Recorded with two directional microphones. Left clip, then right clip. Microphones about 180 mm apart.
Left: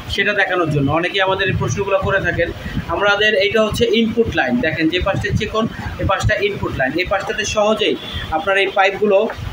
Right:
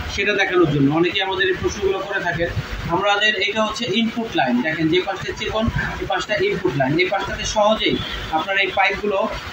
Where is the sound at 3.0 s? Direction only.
50° left (ahead or behind).